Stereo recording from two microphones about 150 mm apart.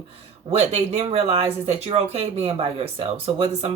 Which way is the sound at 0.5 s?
45° right (ahead or behind).